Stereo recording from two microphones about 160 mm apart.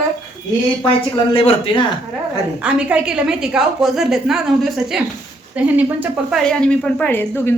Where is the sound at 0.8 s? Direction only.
35° left (ahead or behind).